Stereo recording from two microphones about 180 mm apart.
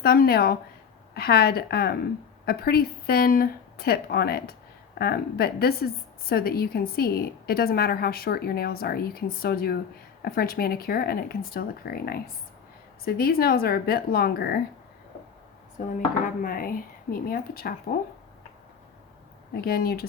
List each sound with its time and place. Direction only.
0.0 s a woman's voice: 60° left (ahead or behind)
16.4 s a woman's voice: 50° left (ahead or behind)
19.6 s a woman's voice: 60° left (ahead or behind)